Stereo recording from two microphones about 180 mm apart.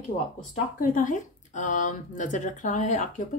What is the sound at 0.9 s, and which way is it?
Speech, 45° left (ahead or behind).